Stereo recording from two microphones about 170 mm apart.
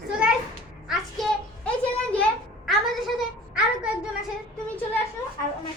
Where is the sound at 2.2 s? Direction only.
Centre (ahead or behind).